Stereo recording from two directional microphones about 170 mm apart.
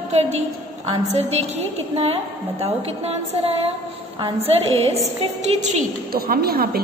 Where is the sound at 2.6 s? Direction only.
35° right (ahead or behind).